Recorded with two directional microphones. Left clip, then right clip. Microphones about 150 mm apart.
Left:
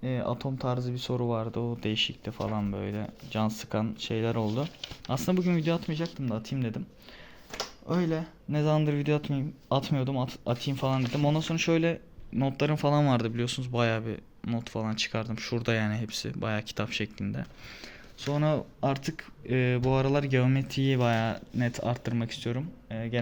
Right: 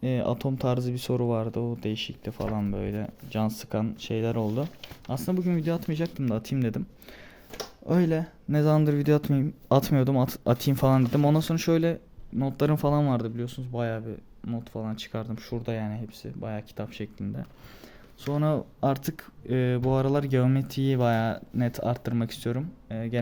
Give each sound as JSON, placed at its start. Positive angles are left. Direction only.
{"t": 0.0, "sound": "speech", "side_deg": -55}
{"t": 1.6, "sound": "speech", "side_deg": -25}
{"t": 5.8, "sound": "speech", "side_deg": -40}
{"t": 6.1, "sound": "speech", "side_deg": -80}
{"t": 7.9, "sound": "speech", "side_deg": -85}
{"t": 8.4, "sound": "speech", "side_deg": -50}
{"t": 12.9, "sound": "speech", "side_deg": -20}
{"t": 15.5, "sound": "speech", "side_deg": -5}
{"t": 18.3, "sound": "speech", "side_deg": -30}